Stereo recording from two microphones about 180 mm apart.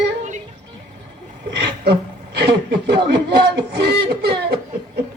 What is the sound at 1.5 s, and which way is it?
A man's voice, 65° right (ahead or behind).